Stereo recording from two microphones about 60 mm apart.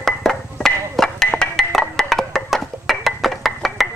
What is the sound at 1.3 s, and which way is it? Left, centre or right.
Wood block, centre.